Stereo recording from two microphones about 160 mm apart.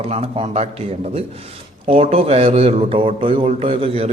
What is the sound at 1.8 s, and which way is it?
A man's voice, 40° right (ahead or behind).